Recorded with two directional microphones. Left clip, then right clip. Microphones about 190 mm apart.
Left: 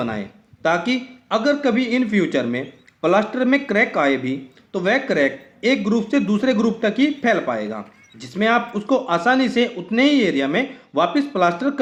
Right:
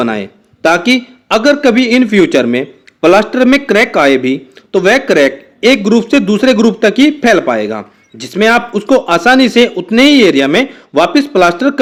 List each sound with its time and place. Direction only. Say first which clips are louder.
0.0 s a man's voice: right 11 dB; 40° right (ahead or behind)